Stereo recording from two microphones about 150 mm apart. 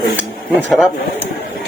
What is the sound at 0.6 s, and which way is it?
Speech, centre (ahead or behind).